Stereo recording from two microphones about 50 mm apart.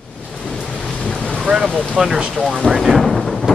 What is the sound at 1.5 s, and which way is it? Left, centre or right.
Speech, centre.